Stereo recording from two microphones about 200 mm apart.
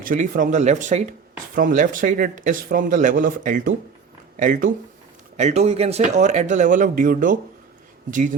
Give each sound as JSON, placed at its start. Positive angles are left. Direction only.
{"t": 0.0, "sound": "speech", "side_deg": -40}